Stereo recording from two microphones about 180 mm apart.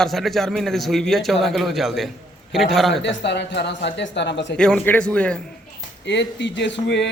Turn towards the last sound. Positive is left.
turn(degrees=75)  # may be behind; listen again after turning